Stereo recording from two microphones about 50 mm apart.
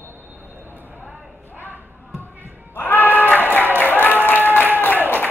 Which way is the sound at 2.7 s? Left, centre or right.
Left.